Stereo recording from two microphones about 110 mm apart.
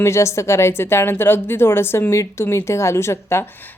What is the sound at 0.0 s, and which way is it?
A woman's voice, 25° left (ahead or behind).